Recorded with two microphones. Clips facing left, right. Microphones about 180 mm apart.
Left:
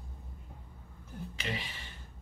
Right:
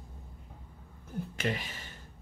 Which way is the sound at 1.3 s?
50° right (ahead or behind).